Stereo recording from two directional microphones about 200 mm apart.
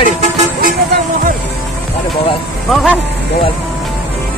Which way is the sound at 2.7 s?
Centre (ahead or behind).